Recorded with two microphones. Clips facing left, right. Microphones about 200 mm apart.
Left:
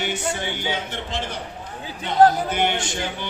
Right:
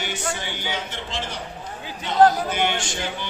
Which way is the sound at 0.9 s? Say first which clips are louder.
Left 2 dB; 55° left (ahead or behind).